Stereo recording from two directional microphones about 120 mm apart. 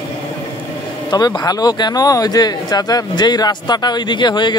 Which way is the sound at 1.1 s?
35° left (ahead or behind).